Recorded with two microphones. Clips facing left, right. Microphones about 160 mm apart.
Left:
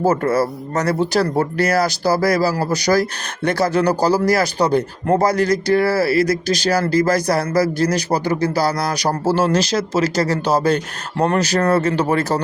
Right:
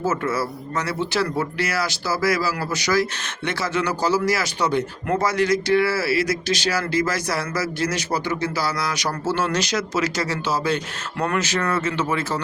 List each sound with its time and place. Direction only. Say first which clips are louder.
0.0 s speech: left 7 dB; 40° left (ahead or behind)